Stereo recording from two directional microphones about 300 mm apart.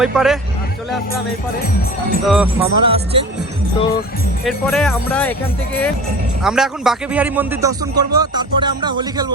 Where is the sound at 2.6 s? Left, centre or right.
Centre.